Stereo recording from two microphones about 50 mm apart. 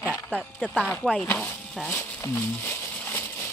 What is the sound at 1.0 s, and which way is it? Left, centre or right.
Speech, left.